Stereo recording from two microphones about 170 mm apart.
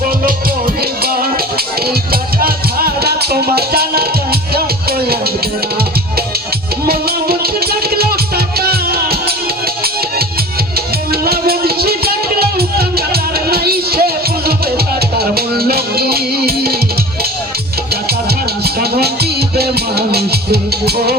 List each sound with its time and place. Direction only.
1.0 s music: 60° right (ahead or behind)
2.4 s music: 60° right (ahead or behind)
6.8 s music: 65° right (ahead or behind)
11.1 s music: 65° right (ahead or behind)
18.6 s music: 70° right (ahead or behind)